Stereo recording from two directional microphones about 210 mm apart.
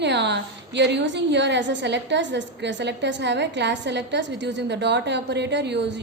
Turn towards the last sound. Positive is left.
turn(degrees=-55)  # may be behind; listen again after turning